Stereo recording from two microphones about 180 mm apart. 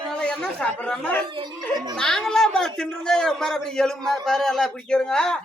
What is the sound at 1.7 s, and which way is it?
Speech, 20° right (ahead or behind).